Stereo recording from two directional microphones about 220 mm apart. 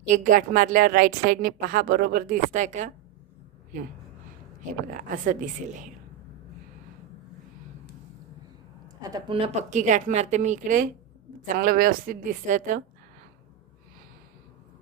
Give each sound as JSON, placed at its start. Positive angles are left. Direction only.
{"t": 0.1, "sound": "a woman's voice", "side_deg": -35}
{"t": 4.9, "sound": "a woman's voice", "side_deg": -35}
{"t": 9.0, "sound": "a woman's voice", "side_deg": -15}